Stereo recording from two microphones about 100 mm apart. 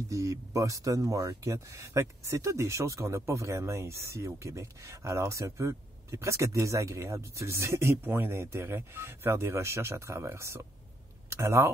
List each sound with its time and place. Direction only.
0.1 s speech: 35° right (ahead or behind)